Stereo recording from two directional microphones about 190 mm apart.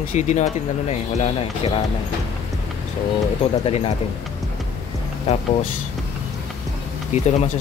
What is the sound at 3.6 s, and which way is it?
Speech, 30° left (ahead or behind).